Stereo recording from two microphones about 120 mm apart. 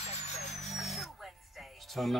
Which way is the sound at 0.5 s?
Centre (ahead or behind).